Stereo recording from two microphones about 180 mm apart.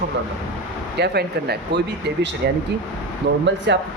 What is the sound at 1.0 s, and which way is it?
Speech, 65° right (ahead or behind).